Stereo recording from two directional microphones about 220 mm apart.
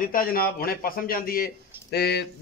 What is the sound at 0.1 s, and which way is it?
Speech, 40° left (ahead or behind).